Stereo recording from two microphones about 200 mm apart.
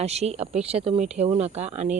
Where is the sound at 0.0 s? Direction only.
30° right (ahead or behind).